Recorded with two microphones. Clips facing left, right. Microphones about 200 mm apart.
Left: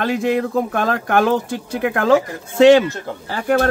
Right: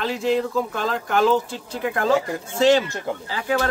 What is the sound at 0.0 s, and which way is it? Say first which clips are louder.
Speech: left 3 dB; 55° left (ahead or behind).